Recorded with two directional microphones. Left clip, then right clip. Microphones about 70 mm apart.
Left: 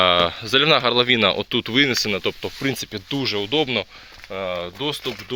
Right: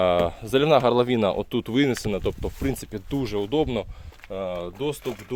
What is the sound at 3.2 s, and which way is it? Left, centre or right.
Speech, right.